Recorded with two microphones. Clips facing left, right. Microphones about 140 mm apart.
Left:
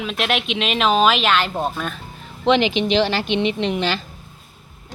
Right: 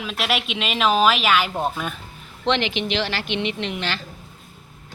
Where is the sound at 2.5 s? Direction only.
15° left (ahead or behind).